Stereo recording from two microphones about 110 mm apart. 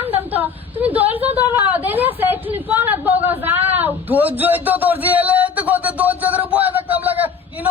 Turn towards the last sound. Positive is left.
turn(degrees=-15)  # may be behind; listen again after turning